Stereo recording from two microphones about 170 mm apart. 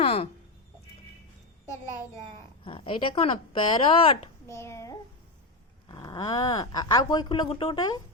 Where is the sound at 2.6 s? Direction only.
30° left (ahead or behind).